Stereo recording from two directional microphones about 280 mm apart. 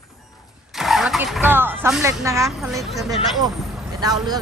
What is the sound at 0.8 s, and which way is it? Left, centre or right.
Speech, centre.